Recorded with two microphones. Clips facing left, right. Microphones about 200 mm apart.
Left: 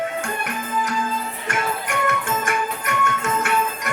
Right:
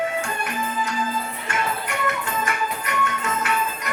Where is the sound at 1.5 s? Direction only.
50° left (ahead or behind).